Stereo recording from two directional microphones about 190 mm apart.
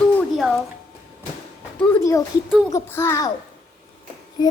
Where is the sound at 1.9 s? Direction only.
15° left (ahead or behind).